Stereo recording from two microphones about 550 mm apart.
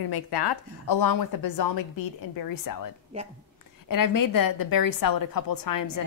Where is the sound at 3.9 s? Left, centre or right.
Left.